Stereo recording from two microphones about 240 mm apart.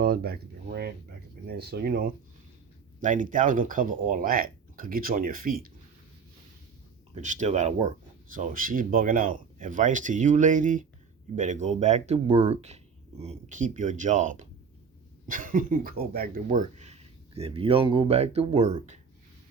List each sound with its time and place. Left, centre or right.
0.0 s speech: right
7.1 s speech: right